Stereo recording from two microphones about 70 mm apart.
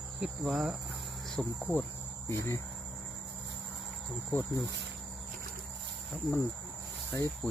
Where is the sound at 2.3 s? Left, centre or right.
Left.